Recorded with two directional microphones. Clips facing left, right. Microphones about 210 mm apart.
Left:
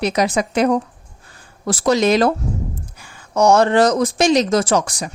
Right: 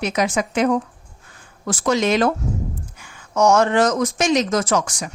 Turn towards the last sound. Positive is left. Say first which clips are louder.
# left 3 dB
turn(degrees=35)  # may be behind; listen again after turning